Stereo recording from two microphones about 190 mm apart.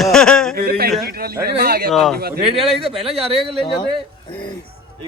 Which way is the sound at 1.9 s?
Centre (ahead or behind).